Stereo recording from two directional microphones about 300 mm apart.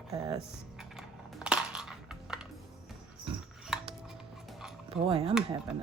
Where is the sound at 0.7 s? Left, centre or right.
Centre.